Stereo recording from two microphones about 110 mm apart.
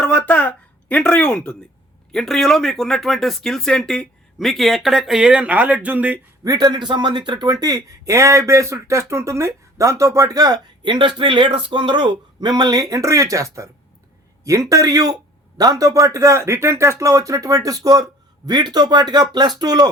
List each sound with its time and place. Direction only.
0.0 s speech: 10° left (ahead or behind); by 6.1 s 15° right (ahead or behind)
6.4 s speech: 35° right (ahead or behind)
6.7 s speech: 45° right (ahead or behind)